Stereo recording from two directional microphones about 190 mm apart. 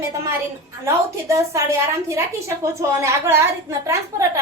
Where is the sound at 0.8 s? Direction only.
15° right (ahead or behind).